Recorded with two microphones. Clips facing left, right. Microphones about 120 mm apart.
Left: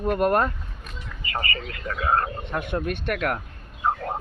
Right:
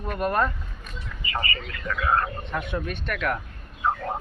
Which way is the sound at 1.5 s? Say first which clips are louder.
Even; 35° left (ahead or behind).